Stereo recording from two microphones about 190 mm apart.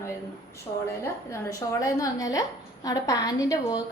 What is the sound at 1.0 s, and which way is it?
A woman's voice, 15° left (ahead or behind).